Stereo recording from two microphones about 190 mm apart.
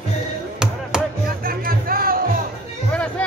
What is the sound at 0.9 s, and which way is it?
Music, 5° right (ahead or behind).